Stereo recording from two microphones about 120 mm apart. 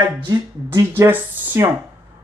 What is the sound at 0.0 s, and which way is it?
Speech, 40° right (ahead or behind).